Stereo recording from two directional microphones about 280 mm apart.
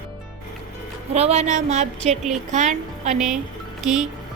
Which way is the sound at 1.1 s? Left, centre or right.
Right.